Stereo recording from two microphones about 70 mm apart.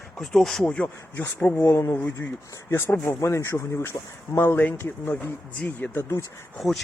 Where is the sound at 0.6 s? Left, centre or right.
Centre.